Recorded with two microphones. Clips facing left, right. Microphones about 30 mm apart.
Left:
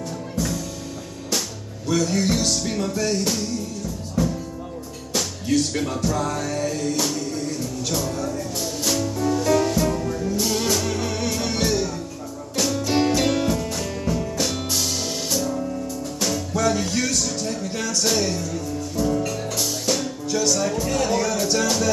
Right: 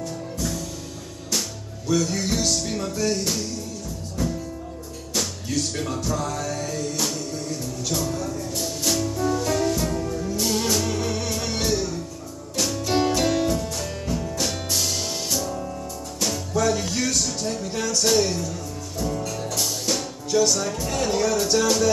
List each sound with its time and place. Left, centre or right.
1.9 s music: centre
5.1 s music: centre
13.8 s music: centre
17.4 s speech: centre
19.9 s music: centre
20.5 s speech: centre